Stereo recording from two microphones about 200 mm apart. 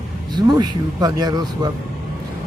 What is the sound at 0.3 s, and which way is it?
Speech, 20° right (ahead or behind).